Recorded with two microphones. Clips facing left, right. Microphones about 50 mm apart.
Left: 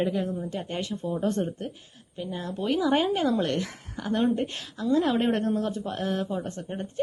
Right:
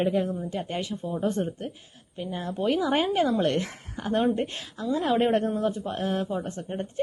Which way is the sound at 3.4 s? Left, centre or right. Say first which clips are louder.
Right 3 dB; right.